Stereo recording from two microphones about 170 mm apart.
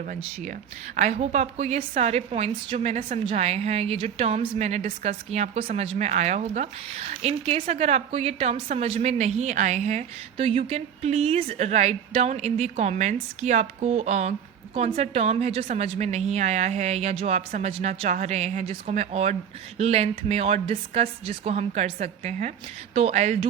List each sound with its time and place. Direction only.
0.9 s a woman's voice: 45° right (ahead or behind)